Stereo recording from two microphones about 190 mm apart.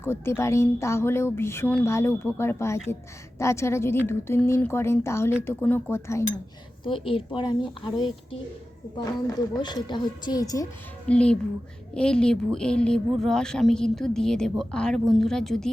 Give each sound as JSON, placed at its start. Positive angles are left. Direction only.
{"t": 0.0, "sound": "a woman's voice", "side_deg": 15}
{"t": 6.8, "sound": "a woman's voice", "side_deg": 25}
{"t": 11.1, "sound": "speech", "side_deg": 5}